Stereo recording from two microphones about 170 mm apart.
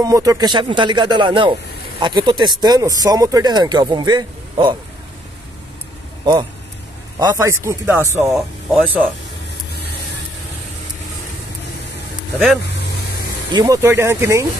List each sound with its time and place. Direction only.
0.0 s speech: 20° right (ahead or behind)
7.2 s speech: 20° right (ahead or behind)
8.2 s speech: centre (ahead or behind)
13.5 s speech: 20° right (ahead or behind)